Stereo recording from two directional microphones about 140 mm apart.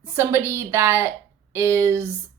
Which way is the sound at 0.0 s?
15° right (ahead or behind).